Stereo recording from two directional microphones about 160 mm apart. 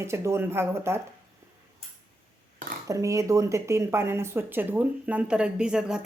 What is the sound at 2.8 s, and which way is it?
Speech, 20° right (ahead or behind).